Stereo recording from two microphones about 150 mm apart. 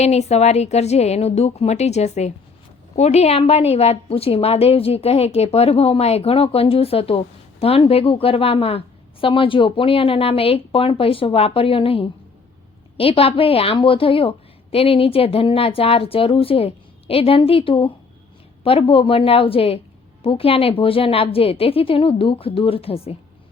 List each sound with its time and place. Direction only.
0.0 s a woman's voice: 45° left (ahead or behind)